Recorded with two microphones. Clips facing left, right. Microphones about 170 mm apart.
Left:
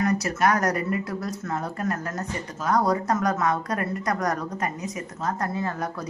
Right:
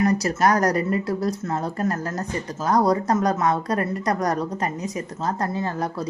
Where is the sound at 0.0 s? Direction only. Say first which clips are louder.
Right 3 dB; 35° right (ahead or behind).